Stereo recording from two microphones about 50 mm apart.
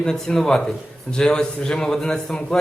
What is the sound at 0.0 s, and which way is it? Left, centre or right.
A man's voice, centre.